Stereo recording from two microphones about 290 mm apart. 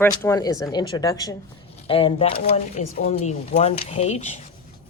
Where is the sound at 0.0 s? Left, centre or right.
Centre.